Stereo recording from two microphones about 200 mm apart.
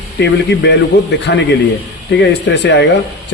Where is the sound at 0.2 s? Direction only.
60° left (ahead or behind).